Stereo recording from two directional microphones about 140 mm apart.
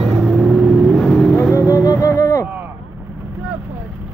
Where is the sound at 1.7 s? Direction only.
25° left (ahead or behind).